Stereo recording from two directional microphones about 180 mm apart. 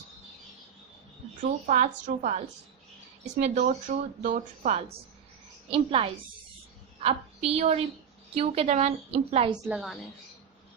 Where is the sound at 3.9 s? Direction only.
50° right (ahead or behind).